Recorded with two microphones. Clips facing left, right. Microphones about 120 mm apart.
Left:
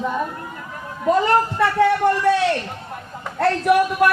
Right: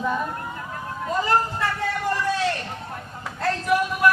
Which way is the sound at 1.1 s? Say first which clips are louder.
Left 6 dB; 65° left (ahead or behind).